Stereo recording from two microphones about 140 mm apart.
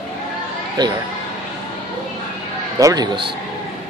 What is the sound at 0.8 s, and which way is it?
Speech, 30° right (ahead or behind).